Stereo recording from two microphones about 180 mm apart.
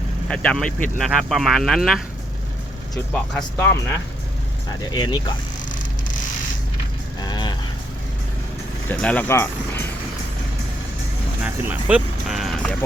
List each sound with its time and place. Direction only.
0.3 s speech: 5° left (ahead or behind)
4.9 s speech: 25° left (ahead or behind)
7.2 s vehicle: 25° left (ahead or behind)
8.9 s speech: 10° left (ahead or behind)
11.4 s a sound: 10° right (ahead or behind)